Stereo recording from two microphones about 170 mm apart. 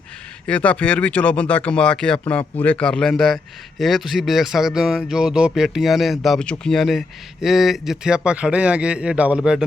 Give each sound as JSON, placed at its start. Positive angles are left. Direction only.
{"t": 0.4, "sound": "speech", "side_deg": 10}